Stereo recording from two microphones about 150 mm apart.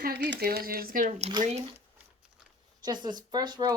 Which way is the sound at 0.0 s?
90° right.